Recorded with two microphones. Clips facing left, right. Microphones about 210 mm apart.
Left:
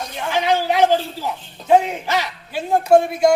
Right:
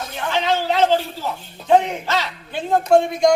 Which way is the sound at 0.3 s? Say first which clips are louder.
Left 2 dB; 15° left (ahead or behind).